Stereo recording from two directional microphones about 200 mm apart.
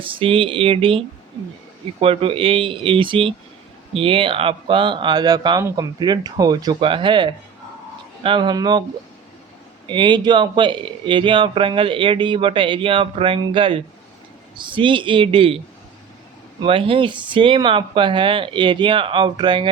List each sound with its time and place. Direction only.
0.0 s speech: 25° right (ahead or behind)
9.9 s speech: 25° right (ahead or behind)
16.6 s speech: 25° right (ahead or behind)